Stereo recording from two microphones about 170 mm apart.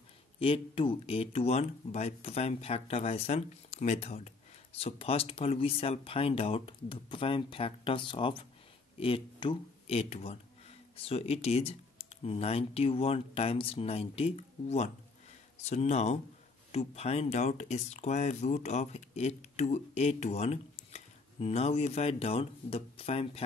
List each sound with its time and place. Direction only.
0.4 s speech: 35° left (ahead or behind)